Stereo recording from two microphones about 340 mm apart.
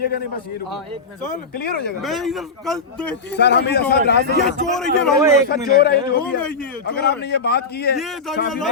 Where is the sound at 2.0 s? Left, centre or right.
Centre.